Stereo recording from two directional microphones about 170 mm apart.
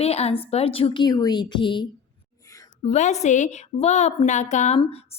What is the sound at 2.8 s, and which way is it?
A woman's voice, 40° left (ahead or behind).